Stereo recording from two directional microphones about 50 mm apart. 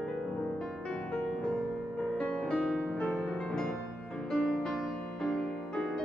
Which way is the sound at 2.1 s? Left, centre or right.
Centre.